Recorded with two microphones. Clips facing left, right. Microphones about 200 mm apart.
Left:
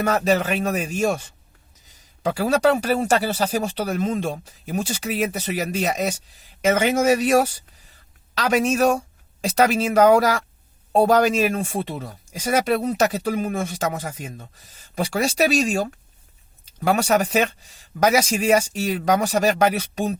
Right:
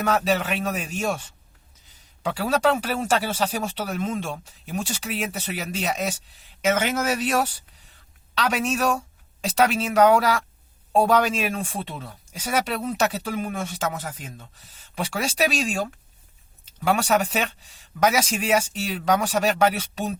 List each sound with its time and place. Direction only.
0.0 s speech: 45° left (ahead or behind)